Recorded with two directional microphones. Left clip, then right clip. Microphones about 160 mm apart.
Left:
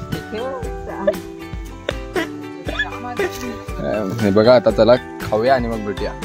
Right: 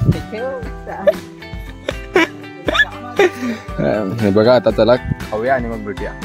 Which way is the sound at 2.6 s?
80° right.